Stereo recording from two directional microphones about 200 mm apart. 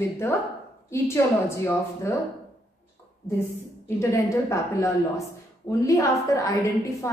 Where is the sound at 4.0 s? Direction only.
15° left (ahead or behind).